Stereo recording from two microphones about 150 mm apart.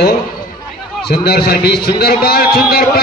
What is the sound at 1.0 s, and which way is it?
A man's voice, 90° left.